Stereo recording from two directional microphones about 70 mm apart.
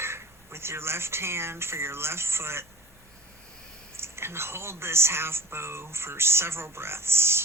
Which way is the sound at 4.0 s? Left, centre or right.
Right.